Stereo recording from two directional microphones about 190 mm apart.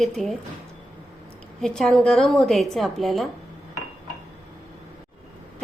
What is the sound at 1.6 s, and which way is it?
A woman's voice, 5° left (ahead or behind).